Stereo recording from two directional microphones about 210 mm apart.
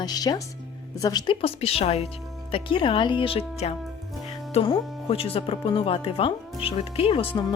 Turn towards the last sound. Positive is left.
turn(degrees=25)  # may be behind; listen again after turning